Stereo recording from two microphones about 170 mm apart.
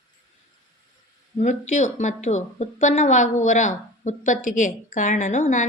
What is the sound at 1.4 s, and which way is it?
Speech, 45° left (ahead or behind).